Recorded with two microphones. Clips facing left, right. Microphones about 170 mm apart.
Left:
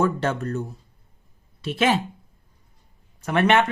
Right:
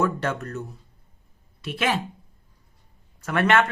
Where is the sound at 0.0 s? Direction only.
30° left (ahead or behind).